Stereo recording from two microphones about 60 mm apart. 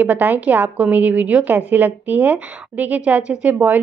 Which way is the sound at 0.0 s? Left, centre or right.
Right.